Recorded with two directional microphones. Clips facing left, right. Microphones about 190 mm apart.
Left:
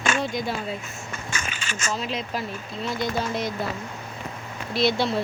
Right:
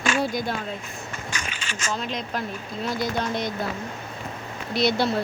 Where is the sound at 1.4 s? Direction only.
45° left (ahead or behind).